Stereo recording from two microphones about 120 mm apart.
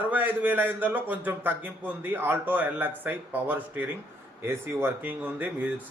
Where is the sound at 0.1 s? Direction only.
15° right (ahead or behind).